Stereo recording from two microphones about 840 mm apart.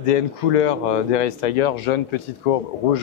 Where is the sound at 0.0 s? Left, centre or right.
Left.